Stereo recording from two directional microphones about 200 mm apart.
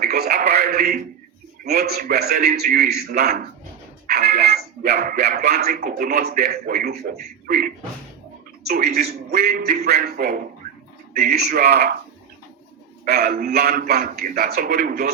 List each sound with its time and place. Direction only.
0.0 s speech: 50° right (ahead or behind)
13.1 s speech: 50° right (ahead or behind)